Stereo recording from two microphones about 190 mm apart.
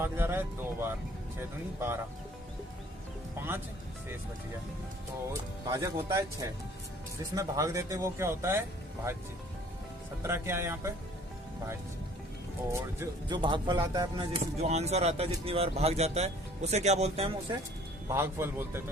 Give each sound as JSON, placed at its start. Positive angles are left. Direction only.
{"t": 0.0, "sound": "speech", "side_deg": -10}
{"t": 5.3, "sound": "speech", "side_deg": -20}
{"t": 7.3, "sound": "speech", "side_deg": -15}
{"t": 10.2, "sound": "speech", "side_deg": -15}
{"t": 12.7, "sound": "speech", "side_deg": -20}
{"t": 18.1, "sound": "speech", "side_deg": -15}